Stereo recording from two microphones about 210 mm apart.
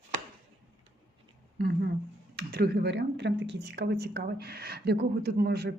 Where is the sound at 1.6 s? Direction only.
45° right (ahead or behind).